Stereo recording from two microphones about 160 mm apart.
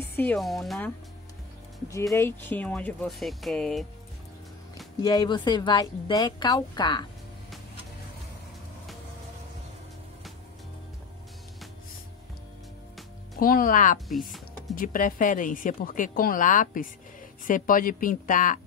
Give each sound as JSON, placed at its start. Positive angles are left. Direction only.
{"t": 0.2, "sound": "speech", "side_deg": 5}
{"t": 2.1, "sound": "speech", "side_deg": 15}
{"t": 5.0, "sound": "a woman's voice", "side_deg": 25}
{"t": 13.4, "sound": "speech", "side_deg": 60}
{"t": 13.9, "sound": "speech", "side_deg": 0}
{"t": 14.8, "sound": "speech", "side_deg": 60}